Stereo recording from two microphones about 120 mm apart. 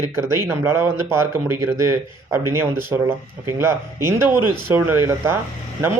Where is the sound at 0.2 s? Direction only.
20° right (ahead or behind).